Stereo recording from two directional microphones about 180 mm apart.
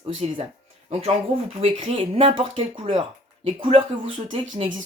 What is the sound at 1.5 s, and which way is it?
Speech, 30° right (ahead or behind).